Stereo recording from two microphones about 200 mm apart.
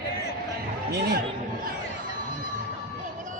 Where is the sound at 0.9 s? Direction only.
55° right (ahead or behind).